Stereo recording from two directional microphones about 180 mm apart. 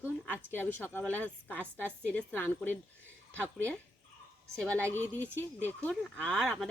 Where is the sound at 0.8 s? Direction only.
10° left (ahead or behind).